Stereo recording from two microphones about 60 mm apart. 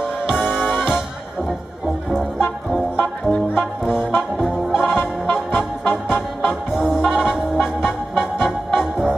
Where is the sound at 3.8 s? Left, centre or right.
Centre.